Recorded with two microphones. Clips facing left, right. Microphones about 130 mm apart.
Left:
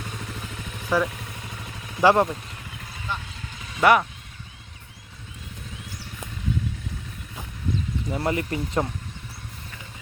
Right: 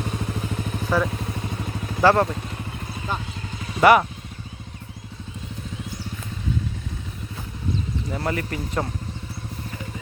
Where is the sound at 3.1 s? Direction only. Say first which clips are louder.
Right 3 dB; 40° right (ahead or behind).